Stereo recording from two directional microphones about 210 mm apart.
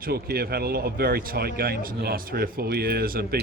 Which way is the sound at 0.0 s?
45° right (ahead or behind).